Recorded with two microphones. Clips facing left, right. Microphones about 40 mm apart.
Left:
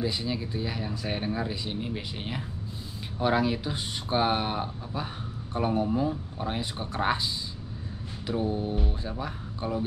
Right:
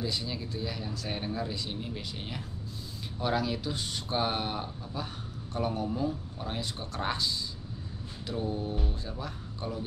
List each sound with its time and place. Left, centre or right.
0.0 s speech: centre
8.3 s speech: centre